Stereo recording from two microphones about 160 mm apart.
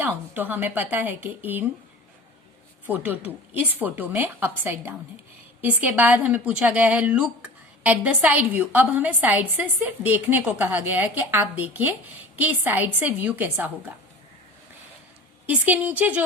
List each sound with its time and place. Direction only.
0.0 s speech: 10° right (ahead or behind)
2.8 s speech: 15° right (ahead or behind)
15.4 s speech: 10° right (ahead or behind)